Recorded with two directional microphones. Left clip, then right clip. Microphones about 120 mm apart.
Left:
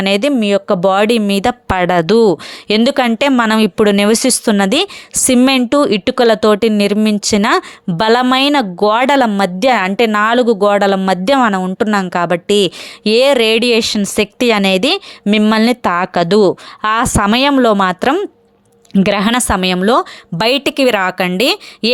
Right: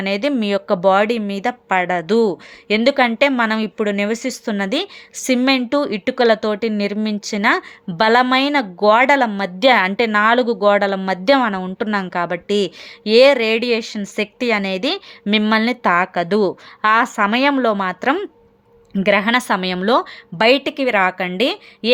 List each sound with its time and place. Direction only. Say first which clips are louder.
0.0 s speech: left 6 dB; 55° left (ahead or behind)
0.3 s speech: left 5 dB; 40° left (ahead or behind)
0.8 s speech: left 3 dB; 60° left (ahead or behind)
9.6 s speech: even; 45° left (ahead or behind); by 15.0 s 65° left (ahead or behind)
15.3 s speech: left 4 dB; 55° left (ahead or behind)
20.4 s speech: left 3 dB; 80° left